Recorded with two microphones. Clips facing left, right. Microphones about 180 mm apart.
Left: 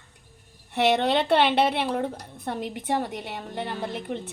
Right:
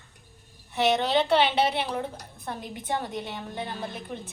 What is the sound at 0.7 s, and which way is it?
A woman's voice, 60° left (ahead or behind).